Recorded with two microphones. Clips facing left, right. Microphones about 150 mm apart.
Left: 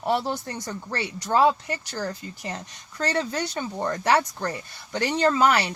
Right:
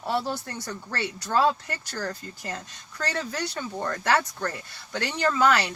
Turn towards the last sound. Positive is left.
turn(degrees=15)  # may be behind; listen again after turning